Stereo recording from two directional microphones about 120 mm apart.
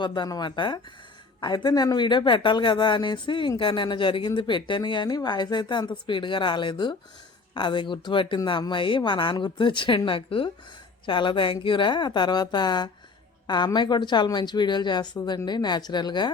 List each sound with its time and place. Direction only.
0.0 s speech: 40° left (ahead or behind)